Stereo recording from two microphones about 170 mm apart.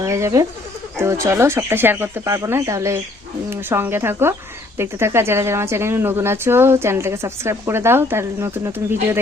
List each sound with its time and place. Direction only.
0.0 s speech: 20° right (ahead or behind)